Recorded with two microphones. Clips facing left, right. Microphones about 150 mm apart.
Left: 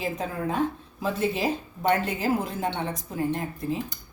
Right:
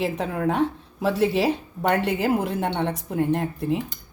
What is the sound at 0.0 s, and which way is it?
A woman's voice, 70° right (ahead or behind).